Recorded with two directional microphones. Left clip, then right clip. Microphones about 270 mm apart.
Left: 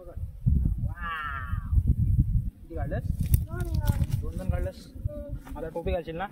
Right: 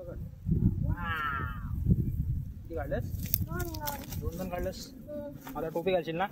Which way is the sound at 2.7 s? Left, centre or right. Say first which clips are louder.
Right 1 dB; right.